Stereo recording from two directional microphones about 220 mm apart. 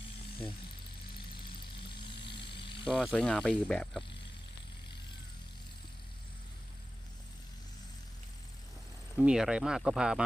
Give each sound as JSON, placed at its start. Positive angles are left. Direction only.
{"t": 2.0, "sound": "vehicle", "side_deg": 20}
{"t": 2.8, "sound": "speech", "side_deg": 0}
{"t": 9.1, "sound": "speech", "side_deg": -5}